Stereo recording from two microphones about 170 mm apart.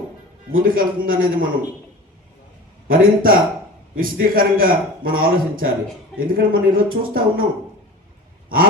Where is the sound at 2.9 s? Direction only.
55° right (ahead or behind).